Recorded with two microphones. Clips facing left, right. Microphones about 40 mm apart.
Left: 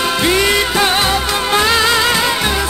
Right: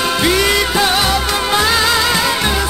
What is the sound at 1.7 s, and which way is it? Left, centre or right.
Music, left.